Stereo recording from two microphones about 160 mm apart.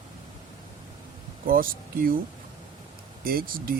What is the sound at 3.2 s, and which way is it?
Speech, 65° right (ahead or behind).